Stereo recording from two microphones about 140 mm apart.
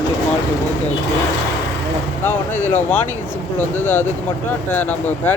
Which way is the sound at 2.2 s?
15° left (ahead or behind).